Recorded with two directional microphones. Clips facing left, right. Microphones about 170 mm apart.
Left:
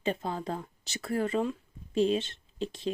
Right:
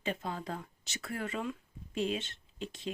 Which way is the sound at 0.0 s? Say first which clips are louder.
Left 5 dB; 30° left (ahead or behind).